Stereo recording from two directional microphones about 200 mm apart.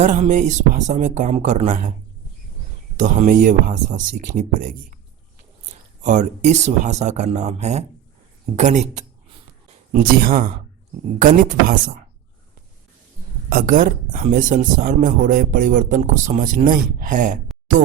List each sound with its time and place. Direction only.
0.0 s speech: 35° right (ahead or behind)
3.0 s speech: 40° right (ahead or behind)
6.0 s speech: 35° right (ahead or behind)
13.5 s speech: 45° right (ahead or behind)